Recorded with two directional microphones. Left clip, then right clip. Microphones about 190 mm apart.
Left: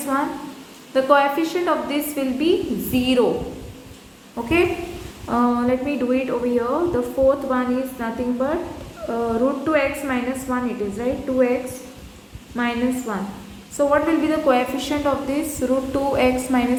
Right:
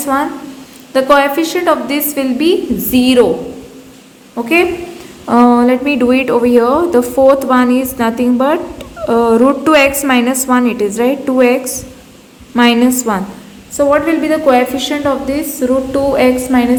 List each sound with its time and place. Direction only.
0.1 s a woman's voice: 30° right (ahead or behind)
4.4 s a woman's voice: 25° right (ahead or behind)
5.2 s a woman's voice: 35° right (ahead or behind)
9.6 s a woman's voice: 50° right (ahead or behind)
12.5 s a woman's voice: 50° right (ahead or behind)
13.7 s a woman's voice: 25° right (ahead or behind)